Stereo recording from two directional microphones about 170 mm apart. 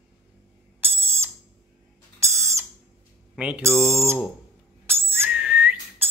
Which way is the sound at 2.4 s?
15° right (ahead or behind).